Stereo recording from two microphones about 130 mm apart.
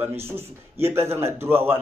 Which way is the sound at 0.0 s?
20° right (ahead or behind).